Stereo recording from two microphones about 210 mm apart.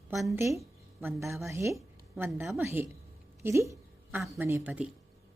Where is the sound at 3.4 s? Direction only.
15° right (ahead or behind).